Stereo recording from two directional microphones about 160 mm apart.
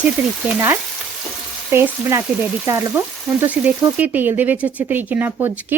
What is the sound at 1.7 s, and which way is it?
A woman's voice, 15° right (ahead or behind).